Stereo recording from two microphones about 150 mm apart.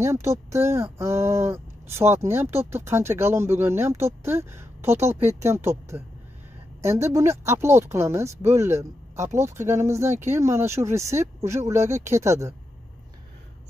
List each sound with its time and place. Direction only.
0.0 s speech: 20° right (ahead or behind)